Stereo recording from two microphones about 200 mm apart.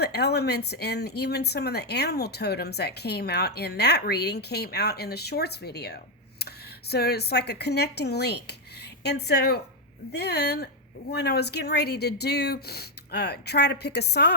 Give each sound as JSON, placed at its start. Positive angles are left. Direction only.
{"t": 0.0, "sound": "speech", "side_deg": 55}